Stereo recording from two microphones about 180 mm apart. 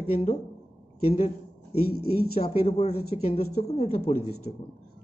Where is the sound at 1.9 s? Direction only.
60° left (ahead or behind).